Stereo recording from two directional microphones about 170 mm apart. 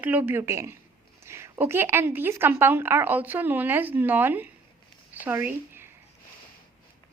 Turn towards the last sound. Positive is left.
turn(degrees=-15)  # may be behind; listen again after turning